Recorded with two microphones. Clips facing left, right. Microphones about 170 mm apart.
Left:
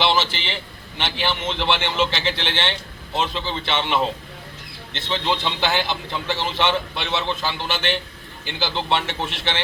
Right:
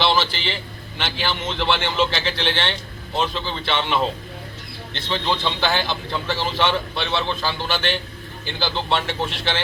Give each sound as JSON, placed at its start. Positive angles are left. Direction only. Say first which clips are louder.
{"t": 0.0, "sound": "a man's voice", "louder": "even", "side_deg": 20}
{"t": 4.9, "sound": "a man's voice", "louder": "even", "side_deg": 20}